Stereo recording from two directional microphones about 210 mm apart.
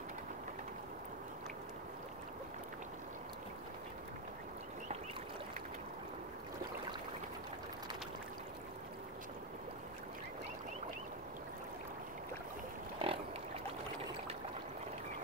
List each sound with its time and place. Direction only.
13.0 s pig: 25° right (ahead or behind)